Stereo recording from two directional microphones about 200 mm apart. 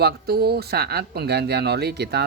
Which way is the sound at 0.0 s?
50° right (ahead or behind).